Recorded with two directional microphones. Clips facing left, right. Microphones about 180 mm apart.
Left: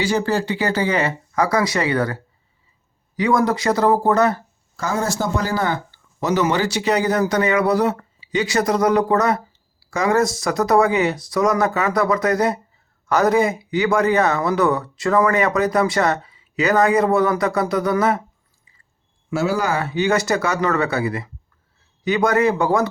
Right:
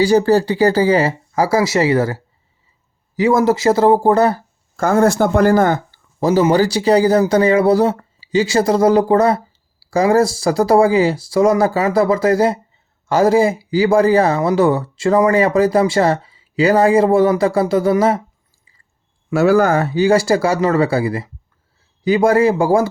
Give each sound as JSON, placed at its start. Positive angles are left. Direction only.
{"t": 0.0, "sound": "speech", "side_deg": -35}
{"t": 4.8, "sound": "speech", "side_deg": -55}
{"t": 19.3, "sound": "speech", "side_deg": -60}